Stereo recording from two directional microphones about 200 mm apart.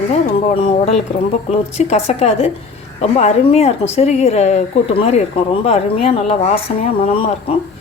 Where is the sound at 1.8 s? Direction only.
35° left (ahead or behind).